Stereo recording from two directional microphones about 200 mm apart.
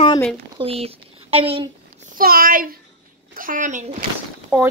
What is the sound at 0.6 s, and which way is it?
Speech, 30° right (ahead or behind).